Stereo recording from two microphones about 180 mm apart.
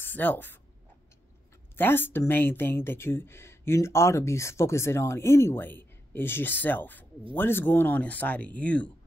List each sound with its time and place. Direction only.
0.0 s speech: 10° left (ahead or behind)
1.8 s speech: 10° left (ahead or behind)